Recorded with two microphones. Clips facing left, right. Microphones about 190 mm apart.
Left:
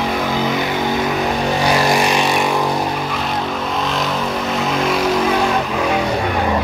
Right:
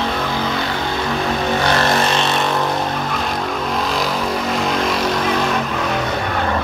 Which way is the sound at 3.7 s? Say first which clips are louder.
Right 1 dB; centre (ahead or behind).